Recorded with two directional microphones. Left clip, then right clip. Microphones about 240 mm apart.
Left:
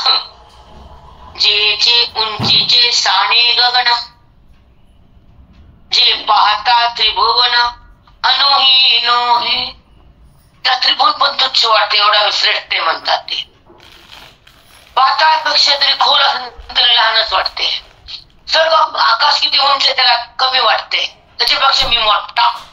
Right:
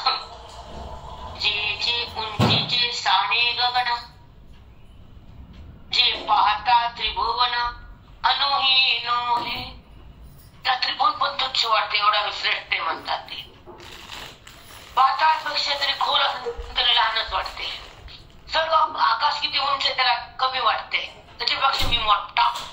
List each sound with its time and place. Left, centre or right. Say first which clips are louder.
1.3 s music: left 12 dB; left
5.9 s a sound: left 9 dB; left
10.6 s speech: left 9 dB; left
15.0 s speech: left 8 dB; left